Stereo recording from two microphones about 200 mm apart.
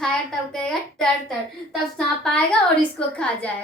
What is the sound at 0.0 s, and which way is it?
A woman's voice, 5° left (ahead or behind).